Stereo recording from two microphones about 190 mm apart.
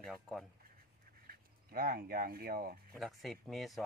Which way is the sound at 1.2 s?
50° right (ahead or behind).